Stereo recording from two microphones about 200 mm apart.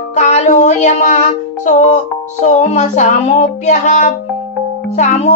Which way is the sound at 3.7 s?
35° left (ahead or behind).